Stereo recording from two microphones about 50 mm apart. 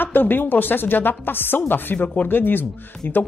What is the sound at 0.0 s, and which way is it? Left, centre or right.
A woman's voice, left.